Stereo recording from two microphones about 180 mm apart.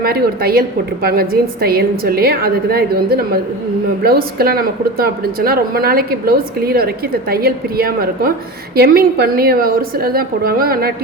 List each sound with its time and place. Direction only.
0.0 s a woman's voice: 60° right (ahead or behind)